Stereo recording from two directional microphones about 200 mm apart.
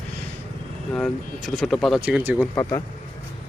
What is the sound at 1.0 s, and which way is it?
Speech, centre (ahead or behind).